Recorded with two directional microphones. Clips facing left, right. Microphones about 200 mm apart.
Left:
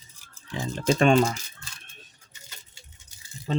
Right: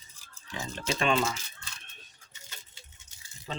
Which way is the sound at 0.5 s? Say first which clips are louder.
Left 6 dB; 35° left (ahead or behind).